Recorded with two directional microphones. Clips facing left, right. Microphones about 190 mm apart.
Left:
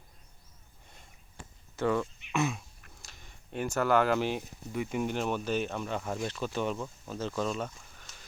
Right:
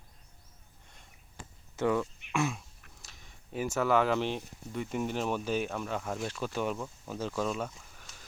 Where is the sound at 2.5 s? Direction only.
Centre (ahead or behind).